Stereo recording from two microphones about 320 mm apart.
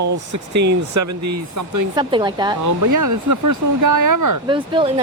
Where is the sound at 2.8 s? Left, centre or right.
Right.